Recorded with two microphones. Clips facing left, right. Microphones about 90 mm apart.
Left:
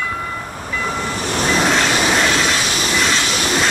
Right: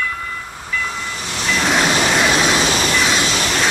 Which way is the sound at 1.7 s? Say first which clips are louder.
Even; 5° right (ahead or behind).